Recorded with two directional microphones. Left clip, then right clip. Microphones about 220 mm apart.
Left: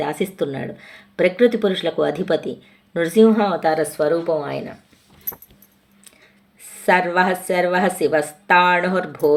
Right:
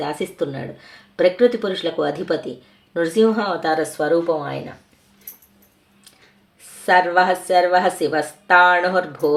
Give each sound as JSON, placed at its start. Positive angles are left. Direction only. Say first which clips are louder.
{"t": 0.0, "sound": "a woman's voice", "louder": "left 1 dB", "side_deg": 30}
{"t": 6.8, "sound": "a woman's voice", "louder": "right 1 dB", "side_deg": 35}